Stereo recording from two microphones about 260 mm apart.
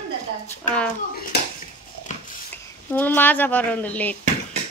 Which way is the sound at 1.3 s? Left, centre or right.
Left.